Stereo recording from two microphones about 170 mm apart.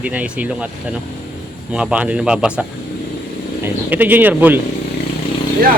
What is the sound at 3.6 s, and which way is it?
Speech, 10° right (ahead or behind).